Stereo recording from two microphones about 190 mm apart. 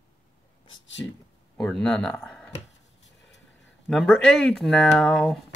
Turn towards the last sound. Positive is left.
turn(degrees=5)  # may be behind; listen again after turning